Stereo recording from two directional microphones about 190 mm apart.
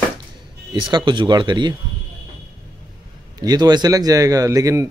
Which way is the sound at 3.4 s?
20° right (ahead or behind).